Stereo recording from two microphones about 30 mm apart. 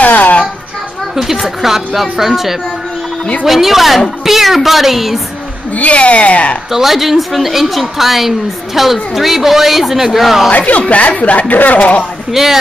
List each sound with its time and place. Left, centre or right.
0.0 s a sound: left
1.1 s a woman's voice: centre
5.8 s a woman's voice: left
6.7 s a woman's voice: centre
10.8 s speech: left
12.3 s a woman's voice: centre